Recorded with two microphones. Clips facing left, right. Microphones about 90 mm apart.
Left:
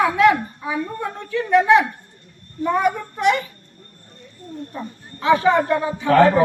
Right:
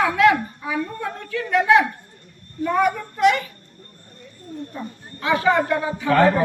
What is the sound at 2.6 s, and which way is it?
Child singing, 20° left (ahead or behind).